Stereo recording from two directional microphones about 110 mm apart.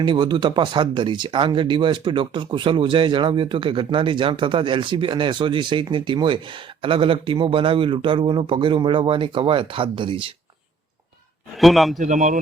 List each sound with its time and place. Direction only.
0.0 s speech: 45° right (ahead or behind)
11.6 s a man's voice: centre (ahead or behind)